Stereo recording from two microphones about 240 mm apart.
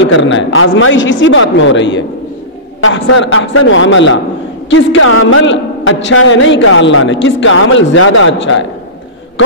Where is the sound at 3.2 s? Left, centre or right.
Left.